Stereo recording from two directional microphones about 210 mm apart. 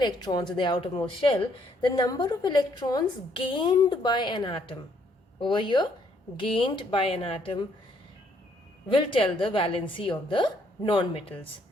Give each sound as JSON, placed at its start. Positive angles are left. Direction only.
{"t": 0.0, "sound": "a woman's voice", "side_deg": 20}
{"t": 8.9, "sound": "a woman's voice", "side_deg": 25}